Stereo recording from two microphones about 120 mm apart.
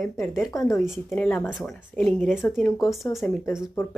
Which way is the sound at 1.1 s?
15° left (ahead or behind).